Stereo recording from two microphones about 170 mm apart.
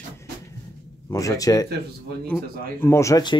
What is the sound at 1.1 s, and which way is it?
Speech, 20° left (ahead or behind).